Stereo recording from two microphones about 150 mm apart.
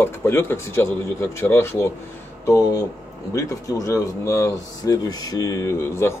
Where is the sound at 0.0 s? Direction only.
15° left (ahead or behind).